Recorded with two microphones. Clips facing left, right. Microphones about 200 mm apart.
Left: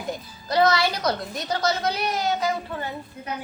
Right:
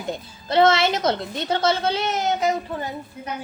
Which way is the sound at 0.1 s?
25° right (ahead or behind).